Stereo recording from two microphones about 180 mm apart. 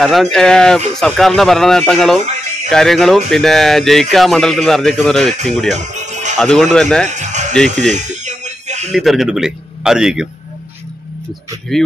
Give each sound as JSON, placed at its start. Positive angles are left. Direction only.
{"t": 0.0, "sound": "speech", "side_deg": 0}
{"t": 5.9, "sound": "music", "side_deg": -40}
{"t": 6.3, "sound": "speech", "side_deg": 0}
{"t": 7.1, "sound": "music", "side_deg": -40}
{"t": 7.5, "sound": "speech", "side_deg": 0}
{"t": 7.8, "sound": "a sound", "side_deg": -40}
{"t": 8.9, "sound": "speech", "side_deg": 0}
{"t": 11.7, "sound": "speech", "side_deg": 0}